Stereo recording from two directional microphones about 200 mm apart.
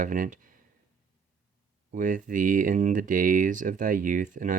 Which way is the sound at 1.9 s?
40° right (ahead or behind).